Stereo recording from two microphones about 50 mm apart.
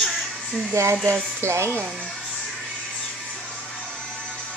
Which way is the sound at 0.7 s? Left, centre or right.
Right.